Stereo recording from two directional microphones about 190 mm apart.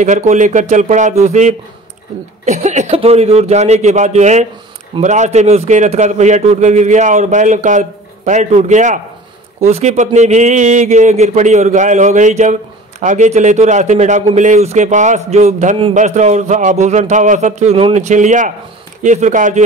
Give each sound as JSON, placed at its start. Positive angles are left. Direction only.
{"t": 0.0, "sound": "a man's voice", "side_deg": -40}